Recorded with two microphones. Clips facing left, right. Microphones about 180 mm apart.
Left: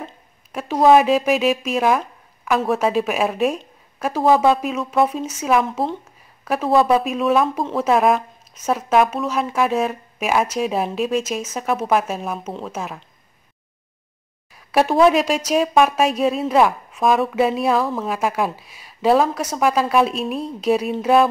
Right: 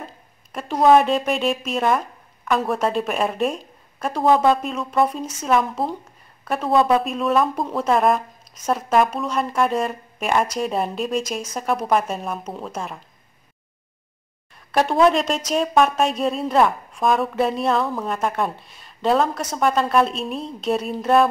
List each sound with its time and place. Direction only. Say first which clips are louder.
0.5 s speech: left 1 dB; 5° left (ahead or behind)
14.5 s speech: left 3 dB; 5° left (ahead or behind)